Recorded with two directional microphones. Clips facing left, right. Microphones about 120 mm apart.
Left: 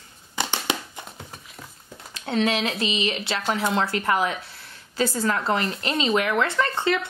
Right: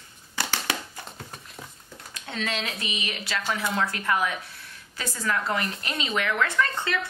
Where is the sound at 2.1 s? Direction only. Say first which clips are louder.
Left 8 dB; 35° left (ahead or behind).